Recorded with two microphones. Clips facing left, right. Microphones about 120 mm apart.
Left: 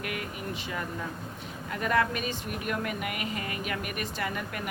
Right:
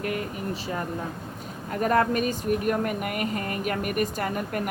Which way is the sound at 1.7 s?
40° right (ahead or behind).